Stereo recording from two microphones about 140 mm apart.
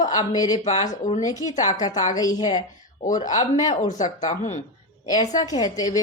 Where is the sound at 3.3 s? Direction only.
60° left (ahead or behind).